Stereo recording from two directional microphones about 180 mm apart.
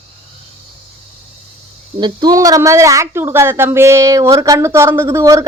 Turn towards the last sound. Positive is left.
turn(degrees=-15)  # may be behind; listen again after turning